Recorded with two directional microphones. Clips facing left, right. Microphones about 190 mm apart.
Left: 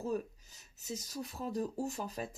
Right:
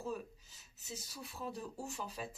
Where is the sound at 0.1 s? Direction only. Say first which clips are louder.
Left 6 dB; 40° left (ahead or behind).